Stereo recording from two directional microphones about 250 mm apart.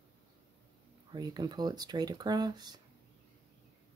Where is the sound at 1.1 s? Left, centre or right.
Centre.